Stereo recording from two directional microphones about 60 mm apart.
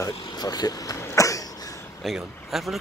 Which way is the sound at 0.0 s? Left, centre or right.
Left.